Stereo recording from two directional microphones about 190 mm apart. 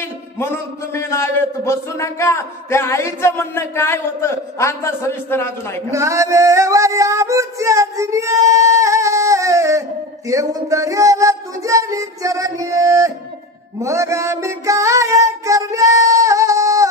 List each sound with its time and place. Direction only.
0.9 s a man's voice: 15° left (ahead or behind)
5.9 s female singing: 15° right (ahead or behind)
13.7 s a sound: 15° right (ahead or behind)